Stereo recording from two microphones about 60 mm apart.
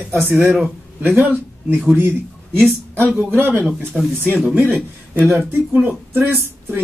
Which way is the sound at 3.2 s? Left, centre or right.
Right.